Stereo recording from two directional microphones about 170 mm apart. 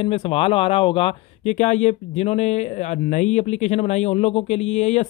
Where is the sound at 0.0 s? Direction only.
35° left (ahead or behind).